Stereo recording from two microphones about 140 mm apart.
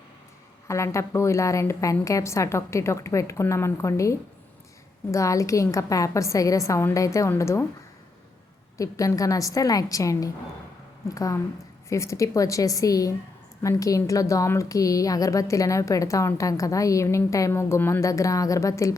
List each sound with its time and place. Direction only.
0.7 s a woman's voice: 20° left (ahead or behind)
8.8 s a woman's voice: 25° left (ahead or behind)